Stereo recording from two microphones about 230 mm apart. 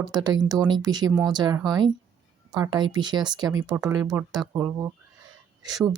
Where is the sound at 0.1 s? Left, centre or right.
Centre.